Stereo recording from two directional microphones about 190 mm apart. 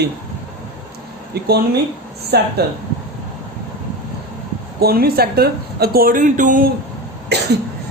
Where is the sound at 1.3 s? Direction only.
55° right (ahead or behind).